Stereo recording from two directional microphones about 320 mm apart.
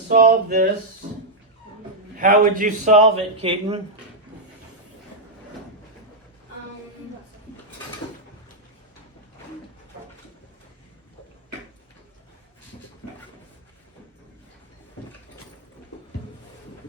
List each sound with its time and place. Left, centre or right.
0.1 s a man's voice: right
2.1 s a man's voice: right